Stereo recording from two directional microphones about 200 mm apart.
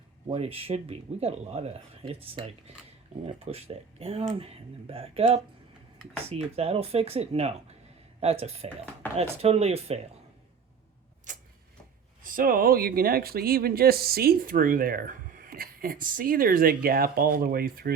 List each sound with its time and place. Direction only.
0.3 s speech: 30° right (ahead or behind)
11.3 s a sound: 40° right (ahead or behind)
12.2 s speech: 45° right (ahead or behind)